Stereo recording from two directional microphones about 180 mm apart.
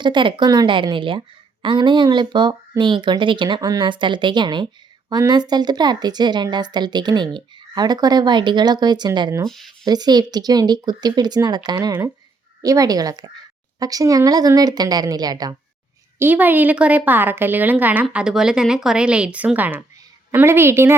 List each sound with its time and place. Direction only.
0.0 s speech: 25° right (ahead or behind)
9.5 s speech: centre (ahead or behind)
9.8 s speech: 20° right (ahead or behind)
16.1 s a woman's voice: 10° right (ahead or behind)